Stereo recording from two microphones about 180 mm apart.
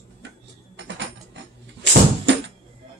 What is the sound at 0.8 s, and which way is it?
Mechanisms, 75° right (ahead or behind).